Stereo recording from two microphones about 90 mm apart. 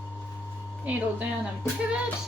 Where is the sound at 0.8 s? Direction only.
15° right (ahead or behind).